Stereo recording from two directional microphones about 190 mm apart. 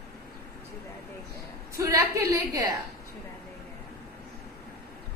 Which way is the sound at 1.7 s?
15° right (ahead or behind).